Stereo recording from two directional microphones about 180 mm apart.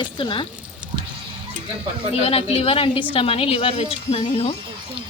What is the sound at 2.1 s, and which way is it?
A woman's voice, 35° left (ahead or behind).